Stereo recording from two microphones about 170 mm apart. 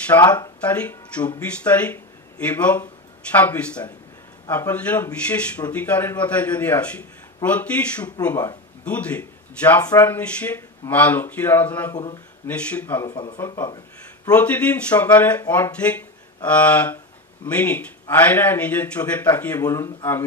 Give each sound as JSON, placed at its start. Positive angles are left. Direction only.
{"t": 0.1, "sound": "speech", "side_deg": 15}
{"t": 8.3, "sound": "speech", "side_deg": 20}
{"t": 8.8, "sound": "speech", "side_deg": 10}
{"t": 11.9, "sound": "speech", "side_deg": 20}
{"t": 12.4, "sound": "speech", "side_deg": 10}
{"t": 13.1, "sound": "speech", "side_deg": 25}
{"t": 14.3, "sound": "speech", "side_deg": 10}